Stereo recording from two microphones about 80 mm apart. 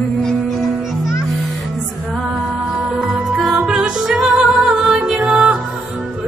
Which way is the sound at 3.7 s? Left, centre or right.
Centre.